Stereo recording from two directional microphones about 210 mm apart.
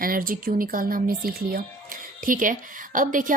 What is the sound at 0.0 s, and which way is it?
Speech, 45° right (ahead or behind).